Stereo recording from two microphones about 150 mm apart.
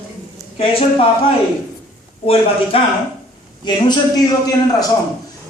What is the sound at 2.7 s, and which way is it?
A man's voice, 40° left (ahead or behind).